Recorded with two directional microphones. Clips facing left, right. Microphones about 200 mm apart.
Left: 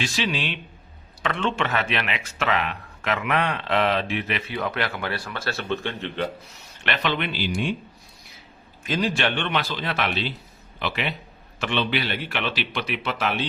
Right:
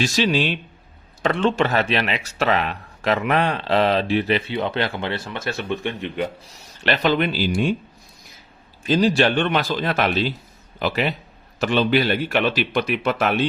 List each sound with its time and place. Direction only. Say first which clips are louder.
0.0 s speech: right 7 dB; 40° right (ahead or behind); by 6.2 s 15° right (ahead or behind)
6.4 s speech: right 6 dB; 35° right (ahead or behind)
8.8 s speech: right 7 dB; 30° right (ahead or behind); by 13.3 s 50° right (ahead or behind)